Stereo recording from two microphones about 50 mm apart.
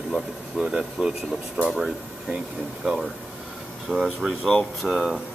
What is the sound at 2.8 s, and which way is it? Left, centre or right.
Speech, centre.